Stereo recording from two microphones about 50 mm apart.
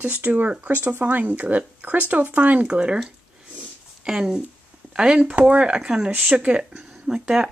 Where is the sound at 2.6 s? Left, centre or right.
Centre.